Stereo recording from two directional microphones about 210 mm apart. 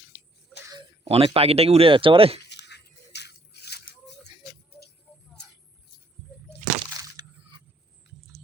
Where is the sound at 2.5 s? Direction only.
55° left (ahead or behind).